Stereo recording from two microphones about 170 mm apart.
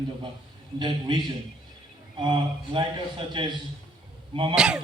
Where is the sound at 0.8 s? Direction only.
25° right (ahead or behind).